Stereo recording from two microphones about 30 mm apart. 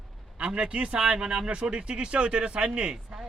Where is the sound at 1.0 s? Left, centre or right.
Right.